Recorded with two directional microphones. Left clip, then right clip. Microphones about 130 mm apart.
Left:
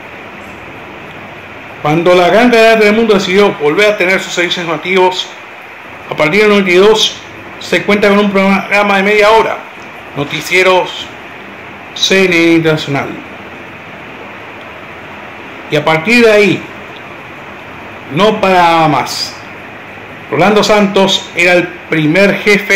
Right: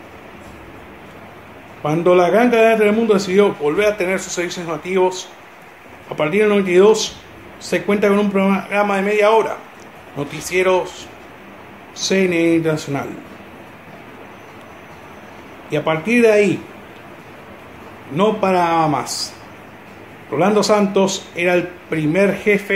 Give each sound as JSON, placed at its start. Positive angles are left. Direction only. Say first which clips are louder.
{"t": 1.8, "sound": "a man's voice", "louder": "left 6 dB", "side_deg": -15}
{"t": 12.1, "sound": "a man's voice", "louder": "left 7 dB", "side_deg": -15}
{"t": 15.7, "sound": "a man's voice", "louder": "left 8 dB", "side_deg": -15}
{"t": 18.1, "sound": "a man's voice", "louder": "left 7 dB", "side_deg": -15}
{"t": 20.2, "sound": "a man's voice", "louder": "left 7 dB", "side_deg": -15}